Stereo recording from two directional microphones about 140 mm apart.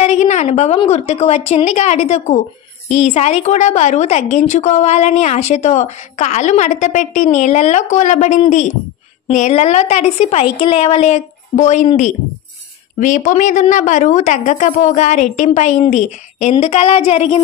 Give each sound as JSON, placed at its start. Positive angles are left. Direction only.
{"t": 0.0, "sound": "a sound", "side_deg": 55}
{"t": 0.8, "sound": "a woman's voice", "side_deg": 50}
{"t": 13.0, "sound": "a woman's voice", "side_deg": 65}